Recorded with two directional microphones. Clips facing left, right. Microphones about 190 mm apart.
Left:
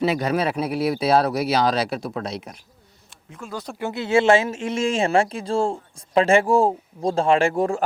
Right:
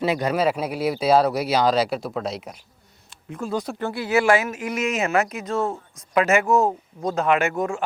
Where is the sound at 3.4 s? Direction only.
40° right (ahead or behind).